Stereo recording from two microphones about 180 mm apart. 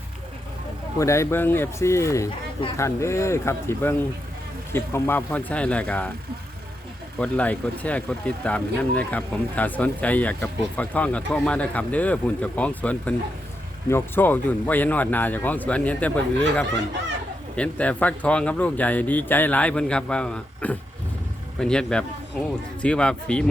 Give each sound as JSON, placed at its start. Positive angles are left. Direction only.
{"t": 0.9, "sound": "speech", "side_deg": 15}
{"t": 7.2, "sound": "speech", "side_deg": 5}
{"t": 17.6, "sound": "speech", "side_deg": 5}